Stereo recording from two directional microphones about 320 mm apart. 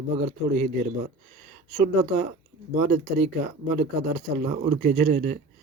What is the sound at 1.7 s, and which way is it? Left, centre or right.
Speech, right.